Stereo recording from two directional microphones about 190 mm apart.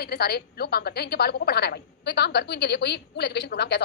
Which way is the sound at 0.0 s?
55° left (ahead or behind).